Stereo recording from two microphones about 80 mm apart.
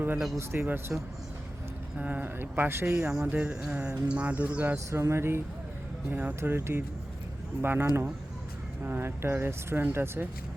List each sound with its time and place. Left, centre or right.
0.6 s speech: right
2.0 s speech: centre
3.1 s speech: centre
4.9 s speech: right
6.1 s speech: right